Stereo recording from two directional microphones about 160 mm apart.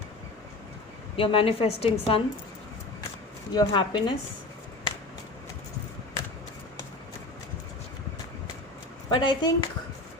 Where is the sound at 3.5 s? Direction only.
25° left (ahead or behind).